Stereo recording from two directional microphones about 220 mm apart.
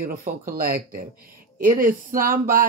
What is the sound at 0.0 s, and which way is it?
Speech, 40° right (ahead or behind).